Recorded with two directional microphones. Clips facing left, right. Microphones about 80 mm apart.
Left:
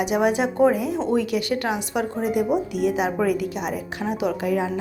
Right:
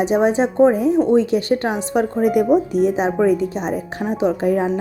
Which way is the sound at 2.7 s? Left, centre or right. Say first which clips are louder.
Right 5 dB; right.